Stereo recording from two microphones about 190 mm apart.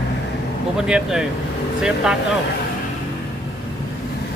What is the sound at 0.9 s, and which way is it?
Speech, 5° right (ahead or behind).